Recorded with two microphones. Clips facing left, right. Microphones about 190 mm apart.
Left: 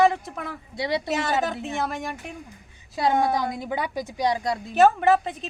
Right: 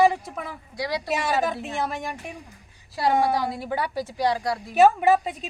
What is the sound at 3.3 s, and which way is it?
Speech, 20° left (ahead or behind).